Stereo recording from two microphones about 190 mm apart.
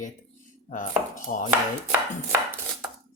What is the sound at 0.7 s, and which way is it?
Speech, 45° left (ahead or behind).